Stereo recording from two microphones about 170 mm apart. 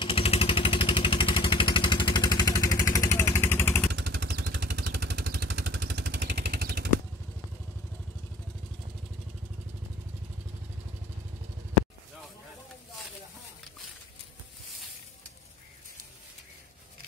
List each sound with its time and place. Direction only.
0.0 s vehicle: 35° left (ahead or behind); by 3.8 s 15° left (ahead or behind)
3.9 s vehicle: 80° right